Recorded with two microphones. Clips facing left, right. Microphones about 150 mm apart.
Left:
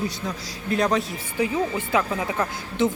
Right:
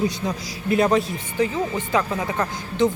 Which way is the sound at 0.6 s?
5° right (ahead or behind).